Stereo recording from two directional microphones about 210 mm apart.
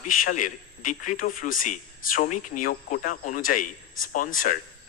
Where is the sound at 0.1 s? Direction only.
40° left (ahead or behind).